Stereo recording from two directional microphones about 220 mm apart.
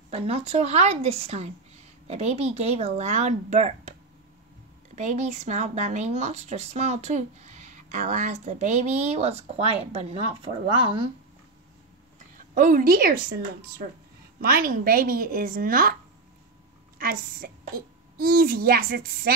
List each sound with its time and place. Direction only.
0.1 s speech: 30° right (ahead or behind)
4.9 s speech: 30° right (ahead or behind)
12.5 s speech: 40° right (ahead or behind)
17.0 s a child's voice: 40° right (ahead or behind)